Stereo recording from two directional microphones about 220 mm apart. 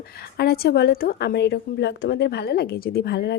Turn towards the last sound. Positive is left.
turn(degrees=50)  # may be behind; listen again after turning